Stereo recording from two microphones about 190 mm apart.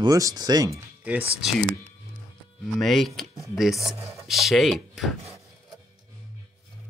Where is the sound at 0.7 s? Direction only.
10° right (ahead or behind).